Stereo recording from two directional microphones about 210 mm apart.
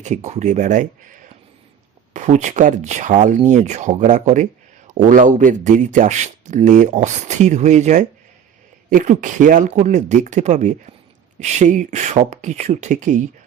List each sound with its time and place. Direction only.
0.0 s speech: 35° right (ahead or behind)
2.1 s speech: 35° right (ahead or behind)